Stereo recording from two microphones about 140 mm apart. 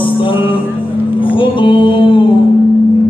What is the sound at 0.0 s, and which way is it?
Music, 35° left (ahead or behind).